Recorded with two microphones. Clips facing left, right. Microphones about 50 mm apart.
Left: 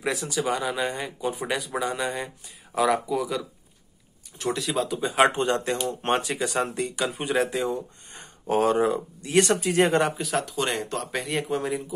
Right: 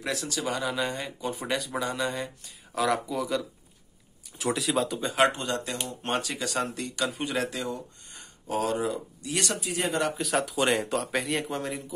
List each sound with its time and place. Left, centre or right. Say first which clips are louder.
0.0 s speech: left 4 dB; centre
5.1 s speech: left 3 dB; left
5.4 s speech: left 7 dB; left
10.1 s speech: even; centre